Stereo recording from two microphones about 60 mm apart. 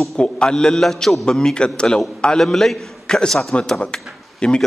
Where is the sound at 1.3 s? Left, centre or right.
Centre.